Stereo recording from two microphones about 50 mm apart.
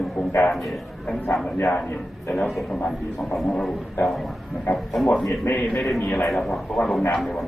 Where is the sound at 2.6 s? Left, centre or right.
Left.